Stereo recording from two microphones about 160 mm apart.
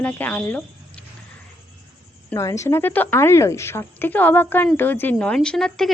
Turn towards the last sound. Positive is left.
turn(degrees=5)  # may be behind; listen again after turning